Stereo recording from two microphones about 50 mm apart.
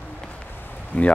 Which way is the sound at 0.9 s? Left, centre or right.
Left.